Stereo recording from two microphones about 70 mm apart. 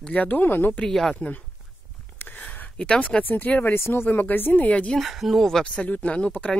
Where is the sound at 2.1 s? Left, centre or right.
Left.